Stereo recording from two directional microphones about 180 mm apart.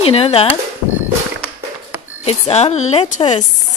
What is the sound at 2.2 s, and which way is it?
A woman's voice, 35° left (ahead or behind).